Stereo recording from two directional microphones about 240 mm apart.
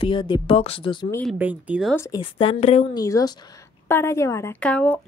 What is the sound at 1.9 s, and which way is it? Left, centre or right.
Speech, centre.